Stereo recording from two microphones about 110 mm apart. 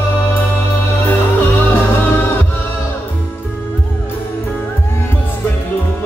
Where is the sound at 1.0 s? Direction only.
20° left (ahead or behind).